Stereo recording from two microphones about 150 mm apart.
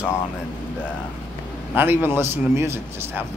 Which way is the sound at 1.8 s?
15° right (ahead or behind).